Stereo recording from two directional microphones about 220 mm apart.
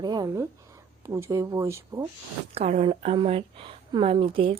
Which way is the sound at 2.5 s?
30° right (ahead or behind).